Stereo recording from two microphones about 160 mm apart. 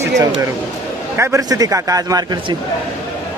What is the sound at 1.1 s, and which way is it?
A man's voice, 15° right (ahead or behind).